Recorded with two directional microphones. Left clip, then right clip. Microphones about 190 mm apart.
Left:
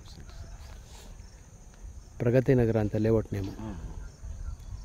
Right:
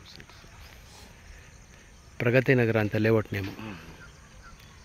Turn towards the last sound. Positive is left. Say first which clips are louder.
# right 2 dB
turn(degrees=10)  # may be behind; listen again after turning